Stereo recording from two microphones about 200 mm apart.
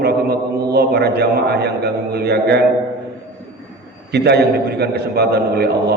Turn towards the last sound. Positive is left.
turn(degrees=-55)  # may be behind; listen again after turning